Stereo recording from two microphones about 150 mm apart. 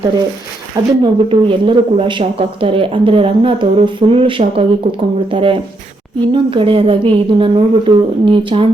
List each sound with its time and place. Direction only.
1.0 s speech: 35° right (ahead or behind)